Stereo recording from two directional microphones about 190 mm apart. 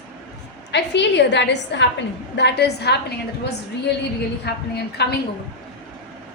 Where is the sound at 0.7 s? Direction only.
65° left (ahead or behind).